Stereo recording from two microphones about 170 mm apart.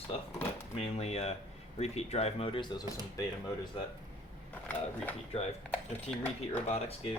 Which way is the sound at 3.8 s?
30° left (ahead or behind).